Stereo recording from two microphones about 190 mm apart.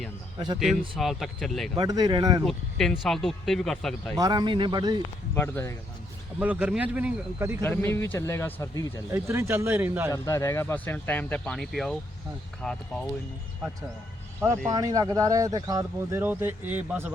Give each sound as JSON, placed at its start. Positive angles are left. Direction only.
{"t": 0.3, "sound": "a man's voice", "side_deg": -25}
{"t": 0.6, "sound": "speech", "side_deg": 0}
{"t": 1.7, "sound": "speech", "side_deg": -20}
{"t": 2.4, "sound": "speech", "side_deg": 0}
{"t": 4.2, "sound": "speech", "side_deg": -20}
{"t": 5.3, "sound": "speech", "side_deg": 15}
{"t": 6.4, "sound": "speech", "side_deg": -5}
{"t": 7.6, "sound": "speech", "side_deg": 10}
{"t": 9.1, "sound": "speech", "side_deg": -15}
{"t": 10.1, "sound": "speech", "side_deg": 15}
{"t": 14.4, "sound": "speech", "side_deg": -20}